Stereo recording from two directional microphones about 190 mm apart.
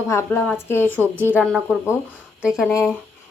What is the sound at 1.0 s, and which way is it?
A woman's voice, 10° right (ahead or behind).